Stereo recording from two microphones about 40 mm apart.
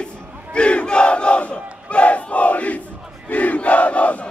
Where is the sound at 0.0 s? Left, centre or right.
Left.